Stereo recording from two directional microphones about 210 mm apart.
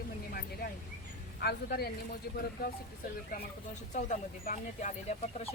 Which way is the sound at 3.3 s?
45° left (ahead or behind).